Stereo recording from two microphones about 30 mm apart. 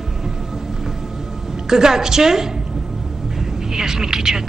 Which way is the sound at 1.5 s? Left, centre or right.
Centre.